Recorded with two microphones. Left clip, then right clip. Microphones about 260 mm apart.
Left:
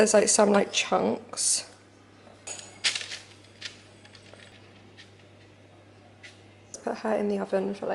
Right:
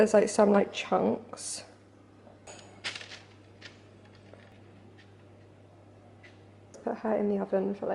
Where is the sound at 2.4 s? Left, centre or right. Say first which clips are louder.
Left 10 dB; centre.